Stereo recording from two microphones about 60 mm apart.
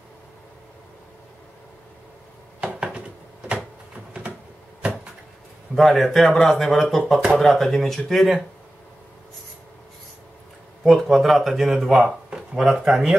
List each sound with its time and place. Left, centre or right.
2.6 s a sound: centre
5.8 s speech: centre
10.8 s speech: centre